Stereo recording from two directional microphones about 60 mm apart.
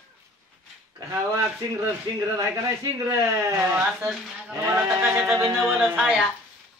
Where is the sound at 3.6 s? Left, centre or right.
Right.